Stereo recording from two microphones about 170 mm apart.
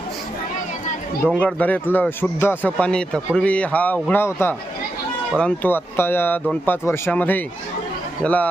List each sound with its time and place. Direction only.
1.4 s a man's voice: 10° left (ahead or behind)